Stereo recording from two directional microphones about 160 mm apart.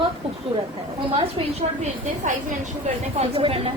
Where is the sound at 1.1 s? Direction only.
35° right (ahead or behind).